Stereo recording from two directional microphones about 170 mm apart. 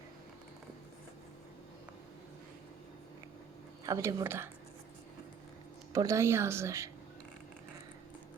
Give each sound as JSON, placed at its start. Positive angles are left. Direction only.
{"t": 3.8, "sound": "speech", "side_deg": -15}
{"t": 5.9, "sound": "speech", "side_deg": -20}